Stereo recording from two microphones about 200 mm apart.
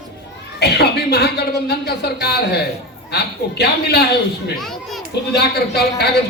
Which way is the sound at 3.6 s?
55° left (ahead or behind).